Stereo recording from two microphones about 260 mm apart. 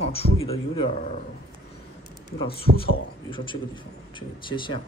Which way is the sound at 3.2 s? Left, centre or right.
Centre.